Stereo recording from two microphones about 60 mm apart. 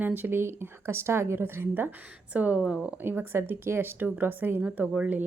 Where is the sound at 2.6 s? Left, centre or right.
Centre.